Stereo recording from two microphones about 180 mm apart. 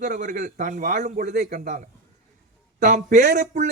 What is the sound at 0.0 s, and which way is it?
Speech, 45° right (ahead or behind).